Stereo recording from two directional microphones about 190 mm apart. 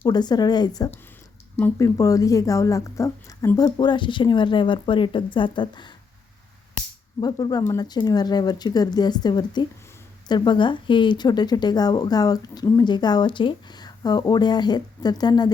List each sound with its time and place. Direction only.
0.0 s speech: 20° left (ahead or behind)
7.2 s speech: 20° left (ahead or behind)